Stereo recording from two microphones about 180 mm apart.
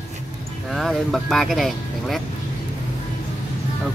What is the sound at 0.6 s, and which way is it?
Speech, centre (ahead or behind).